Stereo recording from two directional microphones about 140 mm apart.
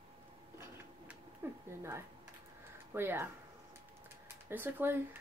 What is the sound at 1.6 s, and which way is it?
Speech, 20° right (ahead or behind).